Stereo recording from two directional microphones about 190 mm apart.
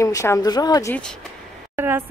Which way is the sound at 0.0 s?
15° left (ahead or behind).